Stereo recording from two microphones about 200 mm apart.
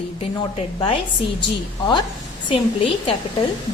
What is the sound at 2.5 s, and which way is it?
Speech, 25° left (ahead or behind).